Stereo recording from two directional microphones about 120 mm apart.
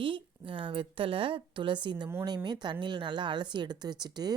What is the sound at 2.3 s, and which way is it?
Speech, 35° right (ahead or behind).